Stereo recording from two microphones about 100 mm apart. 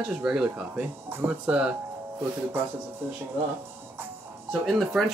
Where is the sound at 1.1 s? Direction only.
20° right (ahead or behind).